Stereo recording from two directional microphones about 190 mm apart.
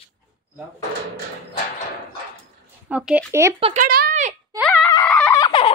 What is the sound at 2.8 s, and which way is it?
Speech, 5° right (ahead or behind).